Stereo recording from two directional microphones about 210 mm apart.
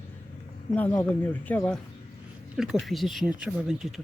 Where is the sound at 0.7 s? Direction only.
10° left (ahead or behind).